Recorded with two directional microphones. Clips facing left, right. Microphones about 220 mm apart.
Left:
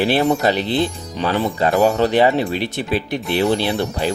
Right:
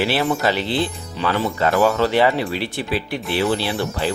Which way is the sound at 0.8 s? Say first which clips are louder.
Left 2 dB; 40° left (ahead or behind).